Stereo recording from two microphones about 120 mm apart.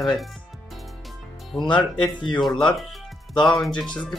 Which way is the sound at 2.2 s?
40° left (ahead or behind).